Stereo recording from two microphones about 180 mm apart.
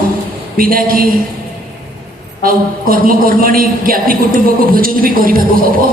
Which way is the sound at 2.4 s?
55° right (ahead or behind).